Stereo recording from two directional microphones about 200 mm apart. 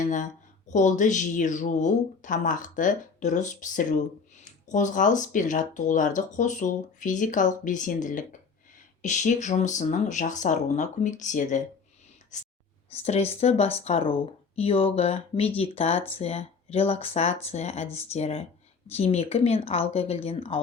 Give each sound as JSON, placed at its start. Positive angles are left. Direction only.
{"t": 0.0, "sound": "speech", "side_deg": 40}